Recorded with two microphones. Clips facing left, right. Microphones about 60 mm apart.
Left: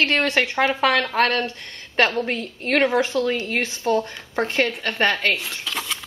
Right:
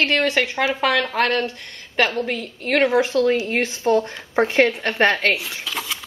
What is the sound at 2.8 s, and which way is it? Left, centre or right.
A woman's voice, centre.